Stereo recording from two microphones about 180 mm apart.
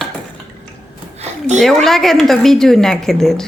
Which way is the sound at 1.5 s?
Centre (ahead or behind).